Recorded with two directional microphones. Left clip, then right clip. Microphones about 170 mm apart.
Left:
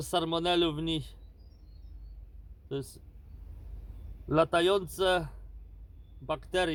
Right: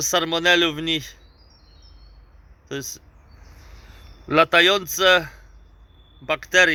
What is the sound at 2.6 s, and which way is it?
Speech, 40° right (ahead or behind).